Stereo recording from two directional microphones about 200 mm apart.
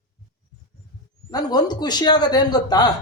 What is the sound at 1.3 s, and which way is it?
A man's voice, 20° left (ahead or behind).